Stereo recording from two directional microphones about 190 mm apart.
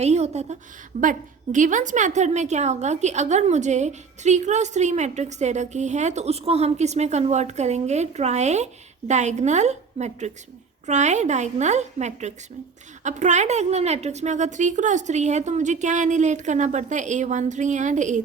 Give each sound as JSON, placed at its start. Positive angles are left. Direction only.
{"t": 0.0, "sound": "a woman's voice", "side_deg": -35}
{"t": 1.5, "sound": "a woman's voice", "side_deg": -40}